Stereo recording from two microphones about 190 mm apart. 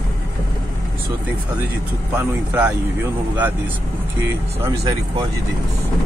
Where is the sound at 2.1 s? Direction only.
10° right (ahead or behind).